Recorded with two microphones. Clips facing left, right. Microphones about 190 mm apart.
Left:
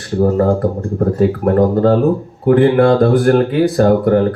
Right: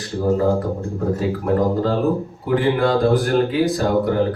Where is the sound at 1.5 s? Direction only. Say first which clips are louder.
Left 6 dB; 55° left (ahead or behind).